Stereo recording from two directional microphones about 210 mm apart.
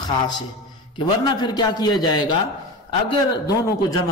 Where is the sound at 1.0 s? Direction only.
20° left (ahead or behind).